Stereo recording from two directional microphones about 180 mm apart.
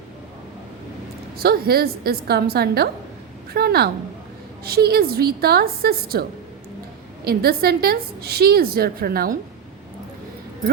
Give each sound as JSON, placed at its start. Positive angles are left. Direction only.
{"t": 1.4, "sound": "a woman's voice", "side_deg": -55}
{"t": 7.3, "sound": "a woman's voice", "side_deg": -60}